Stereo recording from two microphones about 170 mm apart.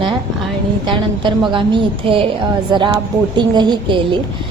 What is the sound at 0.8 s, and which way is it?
A woman's voice, 25° right (ahead or behind).